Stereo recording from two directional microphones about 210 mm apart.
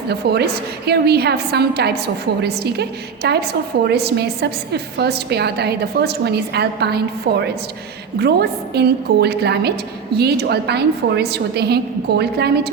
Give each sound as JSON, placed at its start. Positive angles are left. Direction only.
{"t": 0.2, "sound": "a woman's voice", "side_deg": -50}